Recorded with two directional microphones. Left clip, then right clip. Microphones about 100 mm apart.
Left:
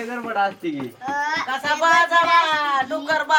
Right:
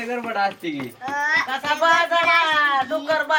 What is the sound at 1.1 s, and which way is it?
Speech, 5° left (ahead or behind).